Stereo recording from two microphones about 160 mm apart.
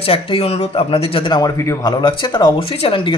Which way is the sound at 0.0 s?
35° left (ahead or behind).